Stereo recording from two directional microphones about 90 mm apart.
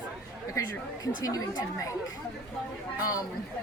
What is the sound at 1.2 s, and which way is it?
Speech, 40° left (ahead or behind).